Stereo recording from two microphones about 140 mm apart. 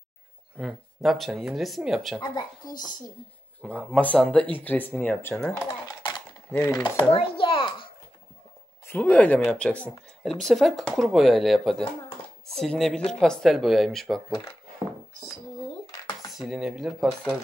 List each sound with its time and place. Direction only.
0.6 s speech: centre (ahead or behind)
2.1 s speech: 30° left (ahead or behind)
3.6 s speech: 10° left (ahead or behind)
6.5 s chopping: 25° left (ahead or behind)
7.1 s a sound: 40° left (ahead or behind)
8.8 s speech: 10° left (ahead or behind)
16.3 s speech: 5° right (ahead or behind)